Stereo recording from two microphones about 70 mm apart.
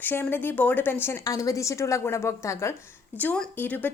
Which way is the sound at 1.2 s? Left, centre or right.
Left.